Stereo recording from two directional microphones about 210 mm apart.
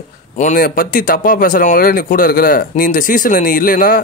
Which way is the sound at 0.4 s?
40° left (ahead or behind).